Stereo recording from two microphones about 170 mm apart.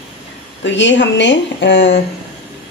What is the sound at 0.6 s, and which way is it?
Speech, 90° left.